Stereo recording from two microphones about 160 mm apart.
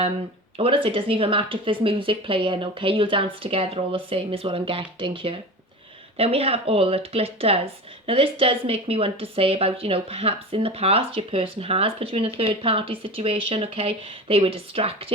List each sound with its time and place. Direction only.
0.5 s speech: 35° right (ahead or behind)